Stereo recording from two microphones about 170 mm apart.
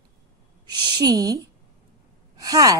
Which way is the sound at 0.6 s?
25° right (ahead or behind).